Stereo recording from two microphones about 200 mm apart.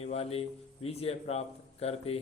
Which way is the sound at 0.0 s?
30° left (ahead or behind).